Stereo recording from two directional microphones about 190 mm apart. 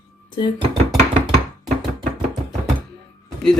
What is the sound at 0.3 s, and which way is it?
Speech, 25° left (ahead or behind).